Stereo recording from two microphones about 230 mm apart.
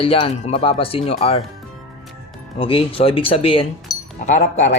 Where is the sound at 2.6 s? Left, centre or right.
Left.